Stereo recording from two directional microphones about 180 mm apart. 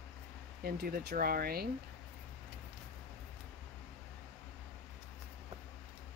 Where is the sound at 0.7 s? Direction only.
55° right (ahead or behind).